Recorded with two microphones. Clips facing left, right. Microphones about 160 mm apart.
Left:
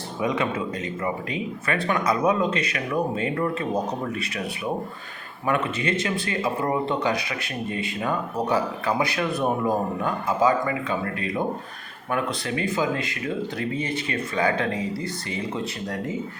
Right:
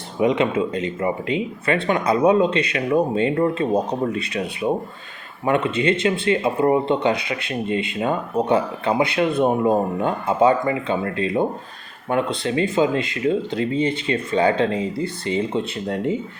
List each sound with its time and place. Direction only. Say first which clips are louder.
0.2 s speech: right 7 dB; 25° right (ahead or behind)